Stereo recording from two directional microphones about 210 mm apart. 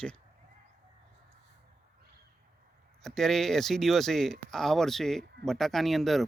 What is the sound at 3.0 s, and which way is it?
Speech, centre (ahead or behind).